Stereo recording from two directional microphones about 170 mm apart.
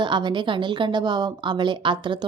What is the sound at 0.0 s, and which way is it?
A woman's voice, 25° right (ahead or behind).